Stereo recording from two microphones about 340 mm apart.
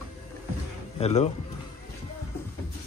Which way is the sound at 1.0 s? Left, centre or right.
Centre.